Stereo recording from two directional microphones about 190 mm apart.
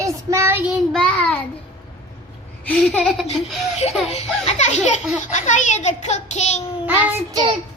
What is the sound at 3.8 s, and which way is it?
A child's voice, 35° left (ahead or behind).